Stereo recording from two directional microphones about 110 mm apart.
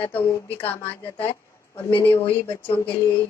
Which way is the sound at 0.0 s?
15° left (ahead or behind).